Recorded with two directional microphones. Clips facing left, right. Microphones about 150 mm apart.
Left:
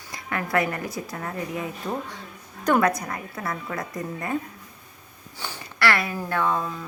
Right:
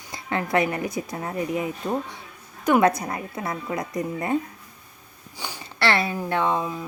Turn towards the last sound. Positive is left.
turn(degrees=-15)  # may be behind; listen again after turning